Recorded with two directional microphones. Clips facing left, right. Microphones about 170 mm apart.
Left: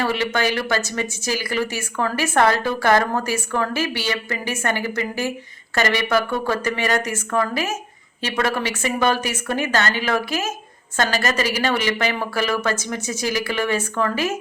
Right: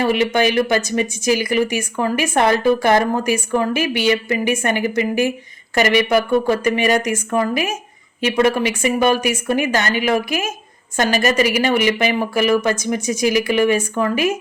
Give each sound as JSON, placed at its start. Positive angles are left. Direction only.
{"t": 0.0, "sound": "a woman's voice", "side_deg": -15}